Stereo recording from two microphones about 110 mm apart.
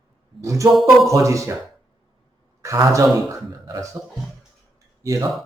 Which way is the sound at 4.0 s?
10° right (ahead or behind).